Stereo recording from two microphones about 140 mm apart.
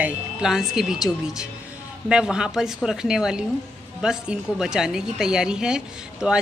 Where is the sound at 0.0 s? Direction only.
5° right (ahead or behind).